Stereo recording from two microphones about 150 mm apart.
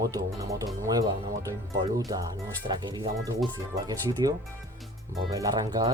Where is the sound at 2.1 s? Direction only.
25° right (ahead or behind).